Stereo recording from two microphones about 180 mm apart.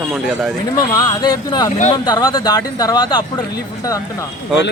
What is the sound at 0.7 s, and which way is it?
Speech, 20° left (ahead or behind).